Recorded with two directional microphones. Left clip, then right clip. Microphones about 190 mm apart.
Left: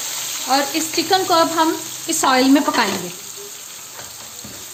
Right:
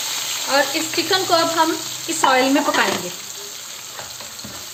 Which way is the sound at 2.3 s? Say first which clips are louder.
Left 2 dB; 70° left (ahead or behind).